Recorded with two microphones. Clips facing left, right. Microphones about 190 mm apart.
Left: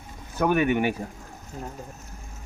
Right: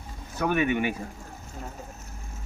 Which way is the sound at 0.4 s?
45° left (ahead or behind).